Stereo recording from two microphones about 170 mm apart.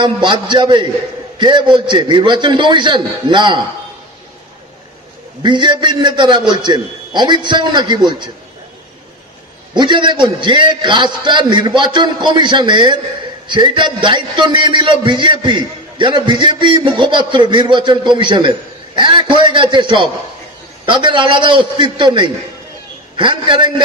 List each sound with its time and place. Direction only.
0.0 s a man's voice: 25° right (ahead or behind)
5.4 s a man's voice: 25° right (ahead or behind)
9.8 s a man's voice: 25° right (ahead or behind)